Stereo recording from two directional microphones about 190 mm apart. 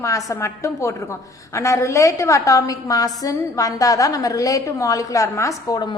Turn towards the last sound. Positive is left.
turn(degrees=20)  # may be behind; listen again after turning